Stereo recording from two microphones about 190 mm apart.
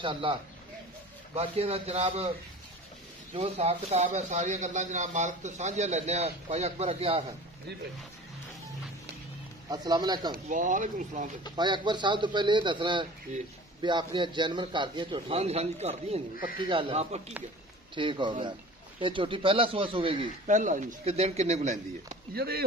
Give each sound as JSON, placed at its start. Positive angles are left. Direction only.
{"t": 0.0, "sound": "a man's voice", "side_deg": -25}
{"t": 3.3, "sound": "a man's voice", "side_deg": -30}
{"t": 9.7, "sound": "speech", "side_deg": -20}
{"t": 10.3, "sound": "speech", "side_deg": -40}
{"t": 11.5, "sound": "speech", "side_deg": -25}
{"t": 20.4, "sound": "a man's voice", "side_deg": -40}
{"t": 22.3, "sound": "speech", "side_deg": -55}